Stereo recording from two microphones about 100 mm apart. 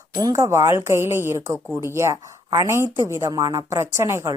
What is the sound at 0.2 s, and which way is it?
A woman's voice, 35° right (ahead or behind).